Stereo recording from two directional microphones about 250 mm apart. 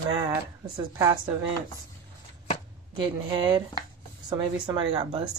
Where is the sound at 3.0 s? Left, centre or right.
Centre.